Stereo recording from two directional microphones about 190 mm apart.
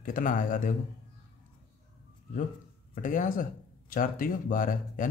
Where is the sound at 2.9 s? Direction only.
45° left (ahead or behind).